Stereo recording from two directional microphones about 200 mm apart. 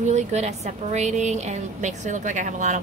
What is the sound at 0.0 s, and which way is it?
A woman's voice, 35° right (ahead or behind).